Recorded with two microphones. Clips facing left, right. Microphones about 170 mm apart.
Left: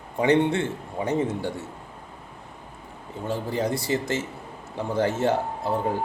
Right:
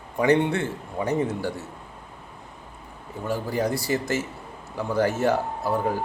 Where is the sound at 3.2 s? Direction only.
25° left (ahead or behind).